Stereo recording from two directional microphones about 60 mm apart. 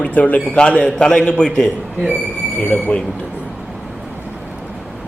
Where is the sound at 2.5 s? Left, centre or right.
Left.